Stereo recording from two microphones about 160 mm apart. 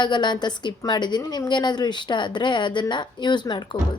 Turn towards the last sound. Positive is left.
turn(degrees=30)  # may be behind; listen again after turning